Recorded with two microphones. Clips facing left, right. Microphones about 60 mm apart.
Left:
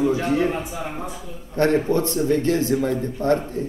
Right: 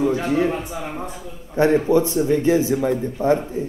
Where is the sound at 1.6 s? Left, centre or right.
Centre.